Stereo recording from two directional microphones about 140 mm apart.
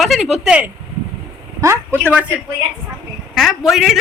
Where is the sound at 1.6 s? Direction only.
20° right (ahead or behind).